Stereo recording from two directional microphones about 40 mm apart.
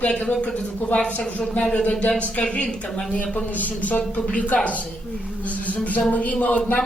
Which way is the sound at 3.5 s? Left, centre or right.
Left.